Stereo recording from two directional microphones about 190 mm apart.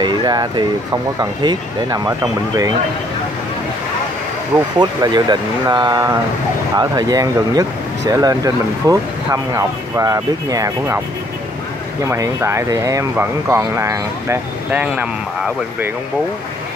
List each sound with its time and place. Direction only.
0.0 s speech: 20° right (ahead or behind)
4.7 s speech: 25° right (ahead or behind)
12.1 s speech: 15° right (ahead or behind)